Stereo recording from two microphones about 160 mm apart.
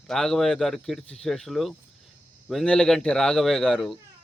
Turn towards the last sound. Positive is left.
turn(degrees=0)  # may be behind; listen again after turning